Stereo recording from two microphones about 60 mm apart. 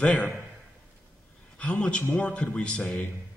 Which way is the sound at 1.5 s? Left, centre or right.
Centre.